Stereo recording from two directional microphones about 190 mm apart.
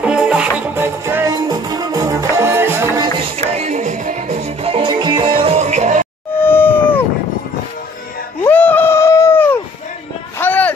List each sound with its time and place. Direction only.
0.0 s music: 5° right (ahead or behind)
3.3 s music: 35° right (ahead or behind)
6.4 s cat: 10° left (ahead or behind)
8.5 s a sound: 10° left (ahead or behind)